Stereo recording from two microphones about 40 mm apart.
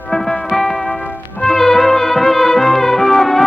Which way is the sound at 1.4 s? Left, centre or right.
Centre.